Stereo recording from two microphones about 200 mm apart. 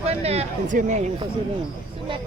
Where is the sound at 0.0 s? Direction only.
30° right (ahead or behind).